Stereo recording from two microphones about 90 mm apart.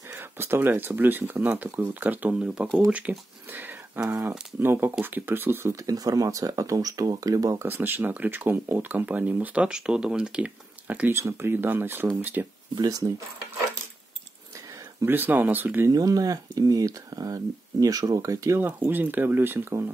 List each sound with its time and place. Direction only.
0.1 s speech: 25° right (ahead or behind)
5.7 s speech: 40° right (ahead or behind)
7.6 s speech: 20° right (ahead or behind)
12.7 s speech: 45° right (ahead or behind)
15.0 s speech: 20° right (ahead or behind)
15.9 s speech: 40° right (ahead or behind)
18.6 s speech: 20° right (ahead or behind)